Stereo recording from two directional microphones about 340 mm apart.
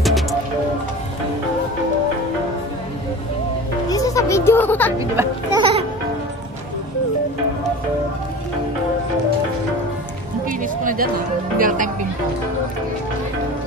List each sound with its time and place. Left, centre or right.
0.0 s music: centre
3.9 s music: centre
4.9 s a sound: centre
10.8 s music: right
11.5 s speech: right